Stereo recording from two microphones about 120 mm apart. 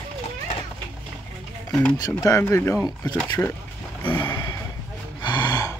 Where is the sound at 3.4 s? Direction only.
10° left (ahead or behind).